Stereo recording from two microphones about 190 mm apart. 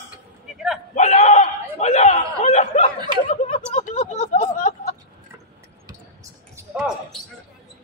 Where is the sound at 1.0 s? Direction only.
35° left (ahead or behind).